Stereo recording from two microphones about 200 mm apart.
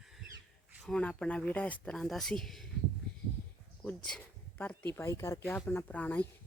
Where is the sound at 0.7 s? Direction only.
5° left (ahead or behind).